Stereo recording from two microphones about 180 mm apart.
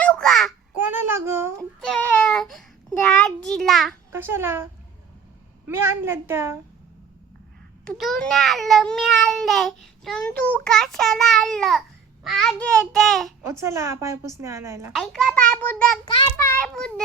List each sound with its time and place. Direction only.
0.0 s a sound: 5° left (ahead or behind)
0.8 s child singing: 10° right (ahead or behind)
1.8 s a child's voice: 5° left (ahead or behind)
4.1 s a woman's voice: 15° right (ahead or behind)
7.9 s speech: centre (ahead or behind)
13.5 s a woman's voice: 15° right (ahead or behind)
14.9 s a child's voice: centre (ahead or behind)